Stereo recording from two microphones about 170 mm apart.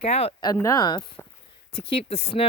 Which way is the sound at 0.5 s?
20° left (ahead or behind).